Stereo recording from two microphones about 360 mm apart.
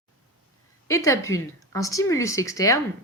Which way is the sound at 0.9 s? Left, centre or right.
Centre.